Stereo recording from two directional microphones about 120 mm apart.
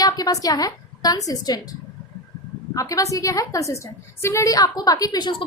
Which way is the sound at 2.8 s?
30° left (ahead or behind).